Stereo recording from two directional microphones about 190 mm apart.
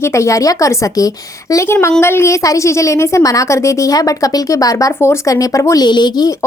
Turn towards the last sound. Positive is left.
turn(degrees=20)  # may be behind; listen again after turning